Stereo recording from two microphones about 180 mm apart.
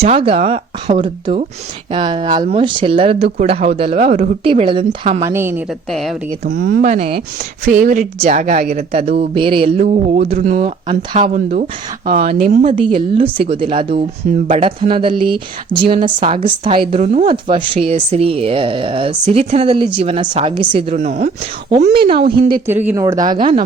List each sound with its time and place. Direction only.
0.0 s speech: 35° right (ahead or behind)
4.4 s speech: 30° right (ahead or behind)
5.2 s speech: 15° right (ahead or behind)
5.9 s a woman's voice: centre (ahead or behind)
6.5 s a woman's voice: 60° right (ahead or behind)
6.8 s speech: 35° right (ahead or behind)
7.6 s speech: 50° right (ahead or behind)
9.1 s speech: 30° right (ahead or behind); by 12.3 s 50° right (ahead or behind)
12.3 s speech: 40° right (ahead or behind)
12.8 s speech: 30° right (ahead or behind)
17.0 s speech: 40° right (ahead or behind)
17.2 s speech: 25° right (ahead or behind)
22.2 s a woman's voice: 55° right (ahead or behind)
22.6 s speech: 10° right (ahead or behind)